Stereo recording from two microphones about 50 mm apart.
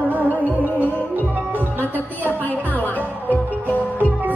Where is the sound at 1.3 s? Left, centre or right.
Right.